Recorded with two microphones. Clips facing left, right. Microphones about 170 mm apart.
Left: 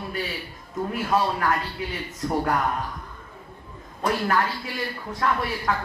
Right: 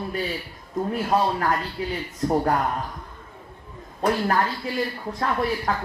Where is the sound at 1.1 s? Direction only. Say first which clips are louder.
Right 1 dB; 35° right (ahead or behind).